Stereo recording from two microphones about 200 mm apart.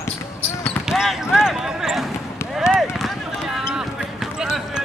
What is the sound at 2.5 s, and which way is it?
Run, centre (ahead or behind).